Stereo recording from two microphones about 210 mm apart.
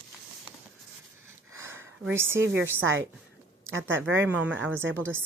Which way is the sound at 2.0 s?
10° right (ahead or behind).